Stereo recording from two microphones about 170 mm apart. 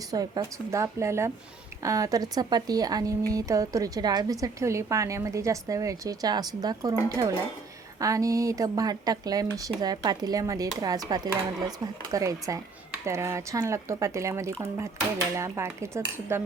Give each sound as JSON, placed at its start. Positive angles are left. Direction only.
{"t": 0.1, "sound": "a woman's voice", "side_deg": -20}